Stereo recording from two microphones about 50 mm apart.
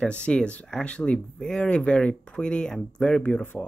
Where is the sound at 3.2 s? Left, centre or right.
Left.